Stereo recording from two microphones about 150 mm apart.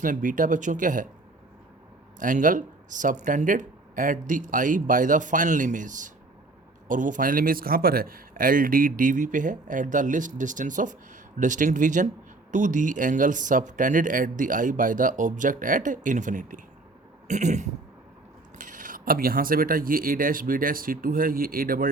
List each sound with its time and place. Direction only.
0.0 s a man's voice: 65° right (ahead or behind)
2.1 s a man's voice: 60° right (ahead or behind)